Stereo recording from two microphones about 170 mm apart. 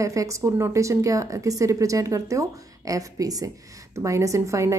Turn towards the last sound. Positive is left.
turn(degrees=-20)  # may be behind; listen again after turning